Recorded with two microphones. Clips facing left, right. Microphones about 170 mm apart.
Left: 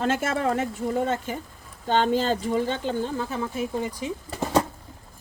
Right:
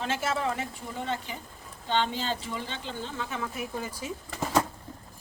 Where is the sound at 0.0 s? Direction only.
50° left (ahead or behind); by 4.1 s 20° left (ahead or behind).